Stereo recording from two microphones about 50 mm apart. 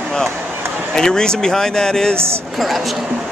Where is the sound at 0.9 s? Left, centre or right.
Centre.